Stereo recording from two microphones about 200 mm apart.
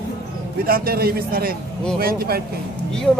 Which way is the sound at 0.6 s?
50° right (ahead or behind).